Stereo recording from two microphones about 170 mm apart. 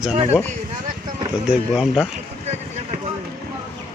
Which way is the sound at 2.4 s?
40° right (ahead or behind).